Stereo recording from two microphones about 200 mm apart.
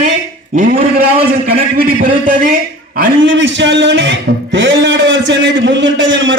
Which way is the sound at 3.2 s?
65° right (ahead or behind).